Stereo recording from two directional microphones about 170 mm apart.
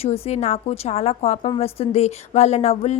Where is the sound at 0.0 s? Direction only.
40° left (ahead or behind).